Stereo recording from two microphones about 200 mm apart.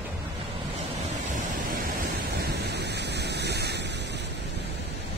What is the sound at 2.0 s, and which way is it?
Waves, 55° right (ahead or behind).